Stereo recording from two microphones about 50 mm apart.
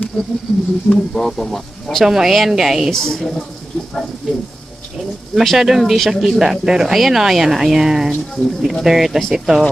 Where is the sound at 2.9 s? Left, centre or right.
Centre.